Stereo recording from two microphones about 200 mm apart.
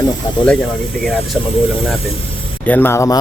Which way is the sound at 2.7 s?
10° left (ahead or behind).